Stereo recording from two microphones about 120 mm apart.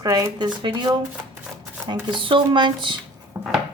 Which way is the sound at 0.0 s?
30° right (ahead or behind).